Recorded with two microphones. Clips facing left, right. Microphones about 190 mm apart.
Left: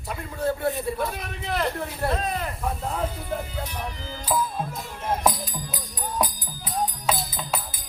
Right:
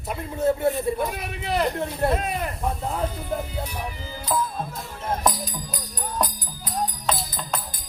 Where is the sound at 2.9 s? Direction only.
5° right (ahead or behind).